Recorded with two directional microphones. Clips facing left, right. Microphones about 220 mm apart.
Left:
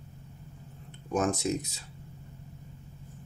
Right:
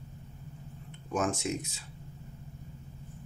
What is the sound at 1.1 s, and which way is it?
Speech, 35° left (ahead or behind).